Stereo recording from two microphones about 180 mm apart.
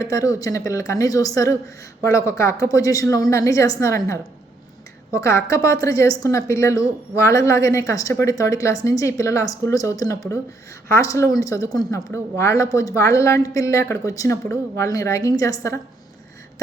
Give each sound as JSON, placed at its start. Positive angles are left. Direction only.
{"t": 0.0, "sound": "a woman's voice", "side_deg": 20}